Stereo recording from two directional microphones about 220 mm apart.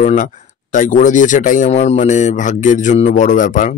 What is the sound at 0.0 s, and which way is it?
Speech, 35° left (ahead or behind).